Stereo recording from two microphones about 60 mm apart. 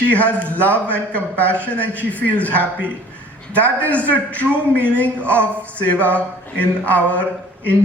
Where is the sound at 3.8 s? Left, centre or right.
Left.